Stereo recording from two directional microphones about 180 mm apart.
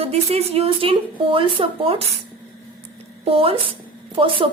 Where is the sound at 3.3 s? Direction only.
30° right (ahead or behind).